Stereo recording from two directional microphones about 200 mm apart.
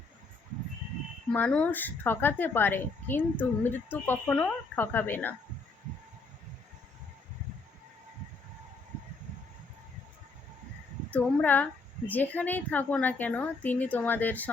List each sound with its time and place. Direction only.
1.3 s speech: 5° left (ahead or behind)
11.1 s speech: 10° left (ahead or behind)